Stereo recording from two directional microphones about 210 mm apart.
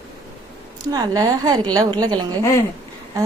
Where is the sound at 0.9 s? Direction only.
15° right (ahead or behind).